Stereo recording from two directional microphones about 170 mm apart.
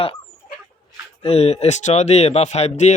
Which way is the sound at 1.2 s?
35° left (ahead or behind).